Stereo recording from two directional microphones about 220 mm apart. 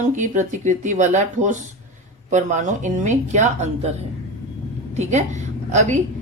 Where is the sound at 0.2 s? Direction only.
35° right (ahead or behind).